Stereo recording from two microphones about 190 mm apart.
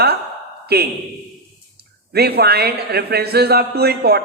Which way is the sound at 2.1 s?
55° right (ahead or behind).